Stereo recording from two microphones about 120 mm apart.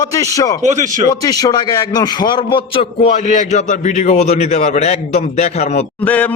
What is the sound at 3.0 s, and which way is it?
A man's voice, 75° left (ahead or behind).